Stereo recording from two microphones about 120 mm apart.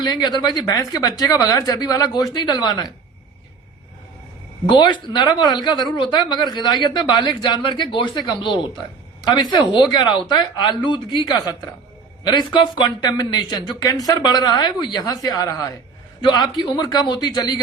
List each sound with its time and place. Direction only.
0.0 s speech: 35° left (ahead or behind)
4.7 s speech: 40° left (ahead or behind)
8.4 s speech: centre (ahead or behind)
9.2 s speech: 40° left (ahead or behind)